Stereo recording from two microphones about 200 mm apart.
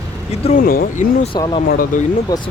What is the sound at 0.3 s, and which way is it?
Speech, 35° left (ahead or behind).